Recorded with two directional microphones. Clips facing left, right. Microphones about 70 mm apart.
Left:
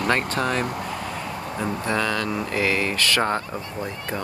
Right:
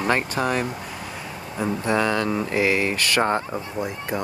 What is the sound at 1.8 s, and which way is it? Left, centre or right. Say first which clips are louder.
Speech: right 3 dB; right.